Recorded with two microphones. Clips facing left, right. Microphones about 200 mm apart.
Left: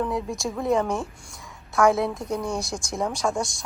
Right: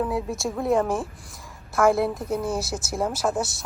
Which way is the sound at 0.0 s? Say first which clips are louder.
Right 1 dB; 5° right (ahead or behind).